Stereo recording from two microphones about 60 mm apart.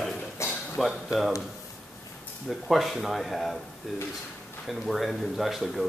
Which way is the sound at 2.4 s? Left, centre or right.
Centre.